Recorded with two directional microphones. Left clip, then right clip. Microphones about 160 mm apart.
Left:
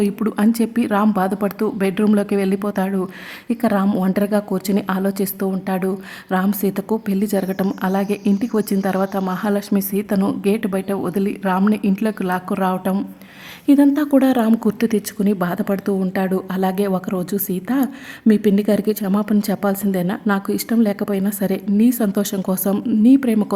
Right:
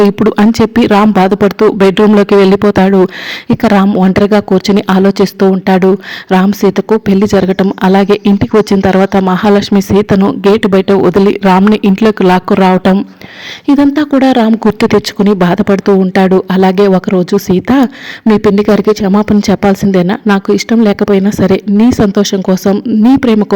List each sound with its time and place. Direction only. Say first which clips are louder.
0.0 s speech: right 12 dB; 35° right (ahead or behind)
13.7 s speech: right 6 dB; 30° right (ahead or behind)